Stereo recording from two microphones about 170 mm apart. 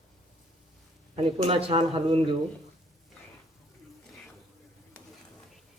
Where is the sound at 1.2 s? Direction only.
35° right (ahead or behind).